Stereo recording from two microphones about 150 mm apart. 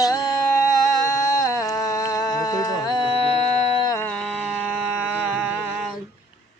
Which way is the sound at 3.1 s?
45° left (ahead or behind).